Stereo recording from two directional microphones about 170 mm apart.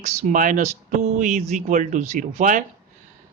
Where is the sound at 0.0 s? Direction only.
45° right (ahead or behind).